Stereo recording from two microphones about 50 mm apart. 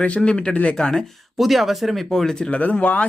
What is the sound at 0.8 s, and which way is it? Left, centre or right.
Speech, centre.